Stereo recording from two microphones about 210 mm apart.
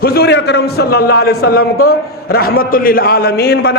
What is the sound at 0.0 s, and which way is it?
A man's voice, 50° left (ahead or behind).